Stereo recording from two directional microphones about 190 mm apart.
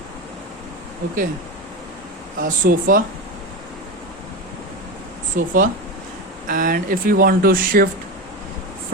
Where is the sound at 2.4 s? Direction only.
45° right (ahead or behind).